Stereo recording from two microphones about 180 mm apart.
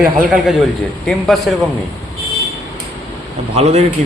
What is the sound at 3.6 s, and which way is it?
Speech, 35° right (ahead or behind).